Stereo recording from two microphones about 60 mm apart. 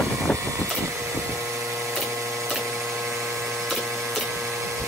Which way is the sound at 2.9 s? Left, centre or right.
Right.